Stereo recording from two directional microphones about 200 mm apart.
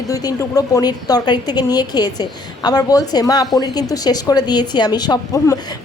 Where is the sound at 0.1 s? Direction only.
15° left (ahead or behind).